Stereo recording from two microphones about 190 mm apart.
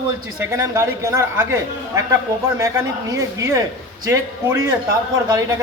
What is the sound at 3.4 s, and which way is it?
Speech, 15° right (ahead or behind).